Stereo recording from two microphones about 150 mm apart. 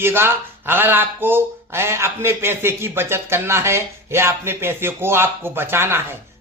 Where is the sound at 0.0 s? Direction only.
15° right (ahead or behind).